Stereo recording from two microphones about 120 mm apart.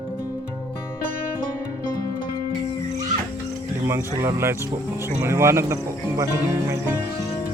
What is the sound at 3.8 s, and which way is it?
Speech, 20° right (ahead or behind).